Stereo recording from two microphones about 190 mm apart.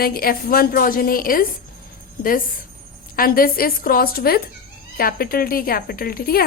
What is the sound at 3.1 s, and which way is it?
A woman's voice, 50° left (ahead or behind).